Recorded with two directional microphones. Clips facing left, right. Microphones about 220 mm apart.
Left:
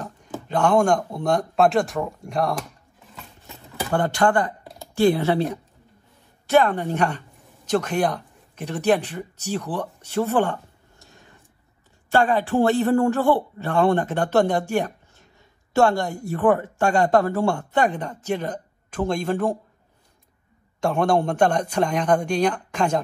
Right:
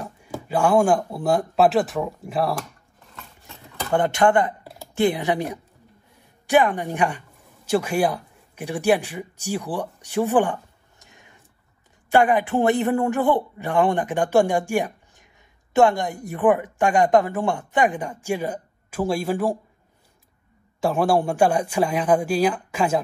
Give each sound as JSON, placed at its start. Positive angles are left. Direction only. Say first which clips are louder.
{"t": 0.0, "sound": "speech", "louder": "even", "side_deg": -10}
{"t": 3.9, "sound": "speech", "louder": "right 2 dB", "side_deg": -20}
{"t": 20.8, "sound": "speech", "louder": "even", "side_deg": -5}